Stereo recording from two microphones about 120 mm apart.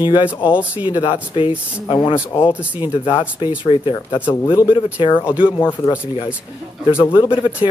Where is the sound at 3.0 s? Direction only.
45° left (ahead or behind).